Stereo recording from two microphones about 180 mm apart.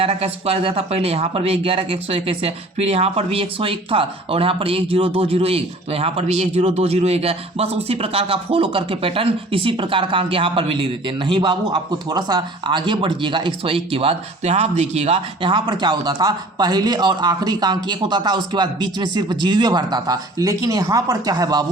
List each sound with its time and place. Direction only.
0.0 s speech: 35° right (ahead or behind)